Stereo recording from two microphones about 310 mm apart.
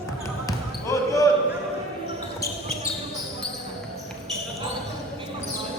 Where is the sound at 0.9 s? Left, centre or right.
Centre.